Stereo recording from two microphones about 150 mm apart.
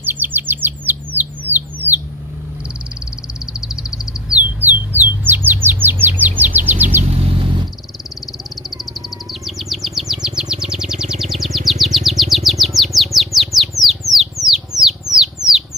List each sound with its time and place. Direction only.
0.0 s bird: 15° right (ahead or behind)
3.6 s bird: 5° right (ahead or behind)
7.2 s vehicle: 40° right (ahead or behind)
9.3 s chirp: centre (ahead or behind)
14.7 s rodents: 25° right (ahead or behind)